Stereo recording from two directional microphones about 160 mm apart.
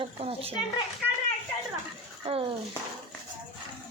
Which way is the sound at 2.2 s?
35° right (ahead or behind).